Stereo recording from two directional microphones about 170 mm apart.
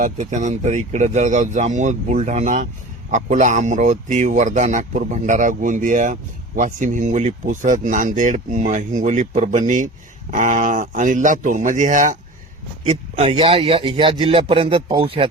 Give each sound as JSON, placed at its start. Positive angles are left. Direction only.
{"t": 0.0, "sound": "speech", "side_deg": -45}
{"t": 12.8, "sound": "a man's voice", "side_deg": -30}